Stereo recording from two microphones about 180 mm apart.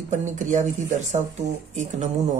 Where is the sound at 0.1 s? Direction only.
45° right (ahead or behind).